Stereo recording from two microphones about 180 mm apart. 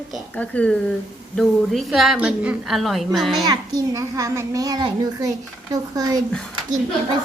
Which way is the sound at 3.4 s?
20° right (ahead or behind).